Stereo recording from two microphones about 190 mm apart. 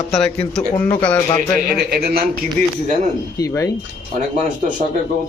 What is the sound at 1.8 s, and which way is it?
Speech, 55° right (ahead or behind).